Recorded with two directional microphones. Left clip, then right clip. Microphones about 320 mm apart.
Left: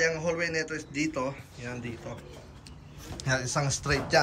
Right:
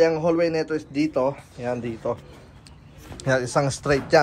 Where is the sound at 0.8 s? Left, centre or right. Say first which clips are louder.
Right 8 dB; centre.